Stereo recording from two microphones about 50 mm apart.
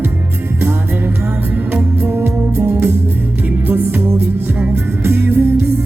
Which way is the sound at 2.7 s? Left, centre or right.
Right.